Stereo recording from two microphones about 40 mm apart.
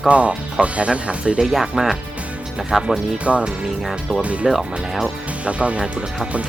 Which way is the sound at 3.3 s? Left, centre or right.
Right.